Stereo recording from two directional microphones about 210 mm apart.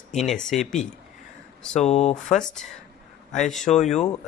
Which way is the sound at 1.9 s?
30° left (ahead or behind).